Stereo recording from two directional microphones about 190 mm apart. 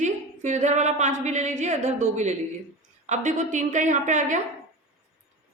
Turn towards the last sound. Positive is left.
turn(degrees=-40)  # may be behind; listen again after turning